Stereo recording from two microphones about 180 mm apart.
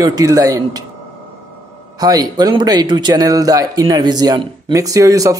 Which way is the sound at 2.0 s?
20° right (ahead or behind).